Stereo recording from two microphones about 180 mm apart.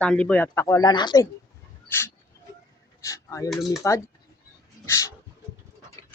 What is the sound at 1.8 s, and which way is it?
Speech, 15° left (ahead or behind).